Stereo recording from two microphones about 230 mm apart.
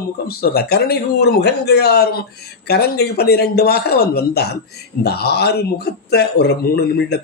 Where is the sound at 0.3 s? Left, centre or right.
Left.